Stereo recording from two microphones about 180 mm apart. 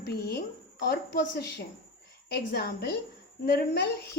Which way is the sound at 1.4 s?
65° left (ahead or behind).